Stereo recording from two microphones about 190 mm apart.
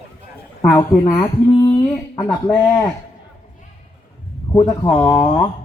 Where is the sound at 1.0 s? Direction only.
20° left (ahead or behind).